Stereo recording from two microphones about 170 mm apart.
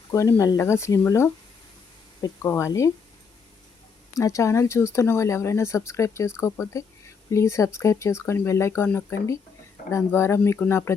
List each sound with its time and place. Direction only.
0.1 s speech: 15° left (ahead or behind)
4.1 s speech: 20° left (ahead or behind)